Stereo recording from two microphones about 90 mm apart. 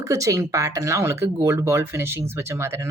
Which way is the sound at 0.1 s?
35° right (ahead or behind).